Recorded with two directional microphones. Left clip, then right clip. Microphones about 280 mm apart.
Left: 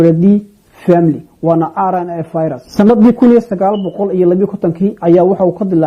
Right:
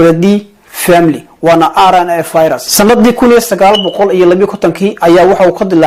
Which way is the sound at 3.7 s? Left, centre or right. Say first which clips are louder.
Right 8 dB; right.